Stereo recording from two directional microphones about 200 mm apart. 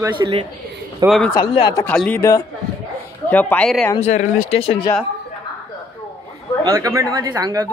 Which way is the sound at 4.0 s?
35° left (ahead or behind).